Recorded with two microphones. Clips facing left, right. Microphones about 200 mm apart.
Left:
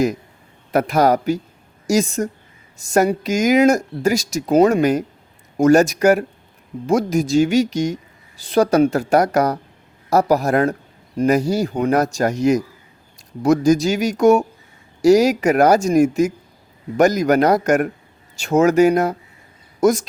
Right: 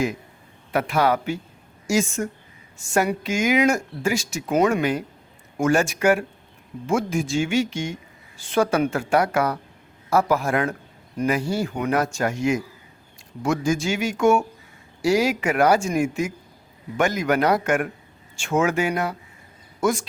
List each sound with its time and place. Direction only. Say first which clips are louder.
0.7 s speech: left 5 dB; 40° left (ahead or behind)